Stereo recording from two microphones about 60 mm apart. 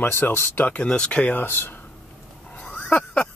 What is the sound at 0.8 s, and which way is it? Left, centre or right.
Speech, centre.